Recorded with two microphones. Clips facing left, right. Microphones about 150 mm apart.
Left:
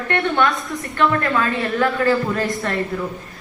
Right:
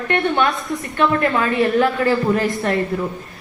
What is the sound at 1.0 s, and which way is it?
Speech, 15° right (ahead or behind).